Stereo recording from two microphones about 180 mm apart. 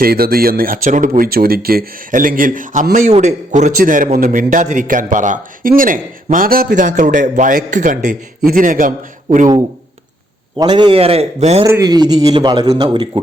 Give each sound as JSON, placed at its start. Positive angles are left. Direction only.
{"t": 0.0, "sound": "speech", "side_deg": -55}
{"t": 10.6, "sound": "a man's voice", "side_deg": -25}
{"t": 11.6, "sound": "a man's voice", "side_deg": -20}